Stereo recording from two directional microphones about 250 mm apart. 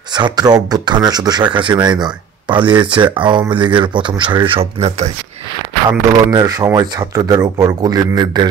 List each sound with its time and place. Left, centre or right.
0.1 s speech: centre
5.9 s speech: centre